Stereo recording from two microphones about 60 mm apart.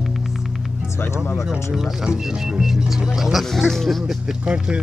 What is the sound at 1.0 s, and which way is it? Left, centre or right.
Speech, left.